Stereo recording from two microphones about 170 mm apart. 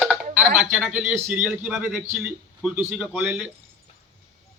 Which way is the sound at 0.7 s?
10° right (ahead or behind).